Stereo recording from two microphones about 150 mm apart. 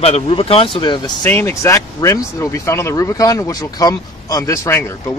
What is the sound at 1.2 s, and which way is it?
Speech, 15° left (ahead or behind).